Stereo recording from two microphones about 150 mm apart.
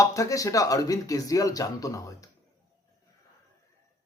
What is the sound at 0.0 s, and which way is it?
A man's voice, 20° left (ahead or behind).